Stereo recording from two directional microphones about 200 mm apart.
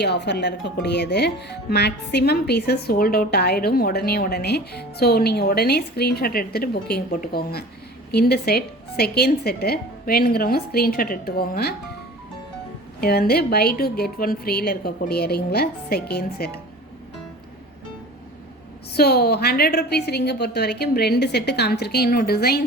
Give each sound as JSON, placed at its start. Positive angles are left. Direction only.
{"t": 0.0, "sound": "a woman's voice", "side_deg": 60}
{"t": 13.0, "sound": "a woman's voice", "side_deg": 50}
{"t": 18.9, "sound": "a woman's voice", "side_deg": 50}